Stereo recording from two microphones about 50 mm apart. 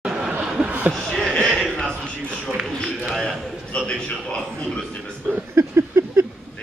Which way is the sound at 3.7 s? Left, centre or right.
Centre.